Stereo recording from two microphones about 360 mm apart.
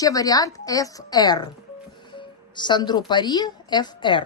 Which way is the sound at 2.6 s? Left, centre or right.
Centre.